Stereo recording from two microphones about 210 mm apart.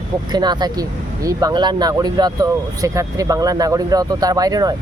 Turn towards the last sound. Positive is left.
turn(degrees=-20)  # may be behind; listen again after turning